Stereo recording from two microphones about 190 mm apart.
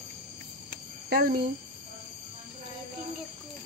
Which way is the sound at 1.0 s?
50° right (ahead or behind).